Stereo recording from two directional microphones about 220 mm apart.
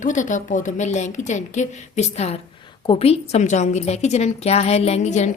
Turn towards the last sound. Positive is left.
turn(degrees=30)  # may be behind; listen again after turning